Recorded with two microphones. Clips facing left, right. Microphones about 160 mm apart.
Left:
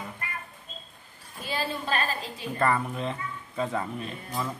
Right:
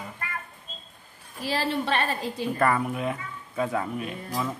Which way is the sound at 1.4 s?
80° right.